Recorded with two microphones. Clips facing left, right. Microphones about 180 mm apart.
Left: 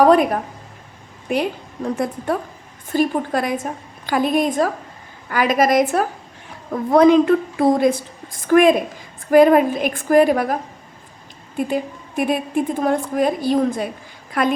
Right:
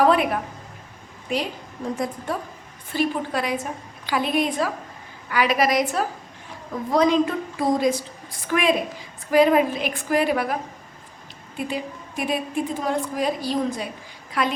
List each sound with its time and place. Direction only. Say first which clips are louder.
0.0 s a sound: left 5 dB; 40° left (ahead or behind)
1.3 s a woman's voice: left 5 dB; 55° left (ahead or behind)
2.9 s a woman's voice: left 5 dB; 45° left (ahead or behind)